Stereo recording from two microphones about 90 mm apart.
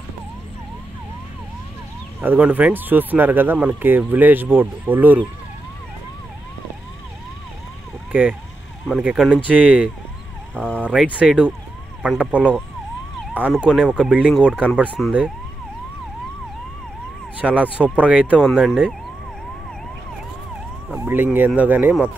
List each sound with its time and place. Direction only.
2.2 s speech: 15° right (ahead or behind)
8.1 s speech: 15° right (ahead or behind)
17.4 s speech: 15° right (ahead or behind)
18.6 s speech: centre (ahead or behind)
20.9 s speech: 20° right (ahead or behind)